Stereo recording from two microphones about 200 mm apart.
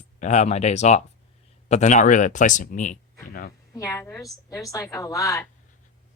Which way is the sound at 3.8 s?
15° left (ahead or behind).